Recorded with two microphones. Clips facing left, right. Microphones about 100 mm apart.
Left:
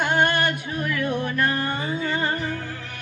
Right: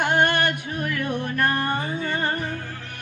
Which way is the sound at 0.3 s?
50° right (ahead or behind).